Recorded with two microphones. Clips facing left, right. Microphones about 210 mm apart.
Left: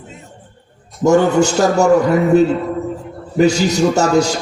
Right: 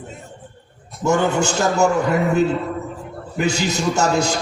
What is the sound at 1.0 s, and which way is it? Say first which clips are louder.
Speech: left 6 dB; 40° left (ahead or behind).